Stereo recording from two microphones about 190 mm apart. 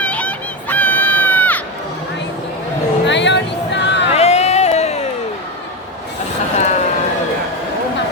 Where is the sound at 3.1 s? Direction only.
70° left (ahead or behind).